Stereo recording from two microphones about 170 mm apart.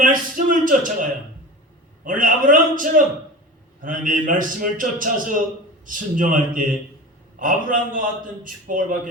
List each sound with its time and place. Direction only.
0.0 s a man's voice: 50° right (ahead or behind)
2.0 s a man's voice: 50° right (ahead or behind)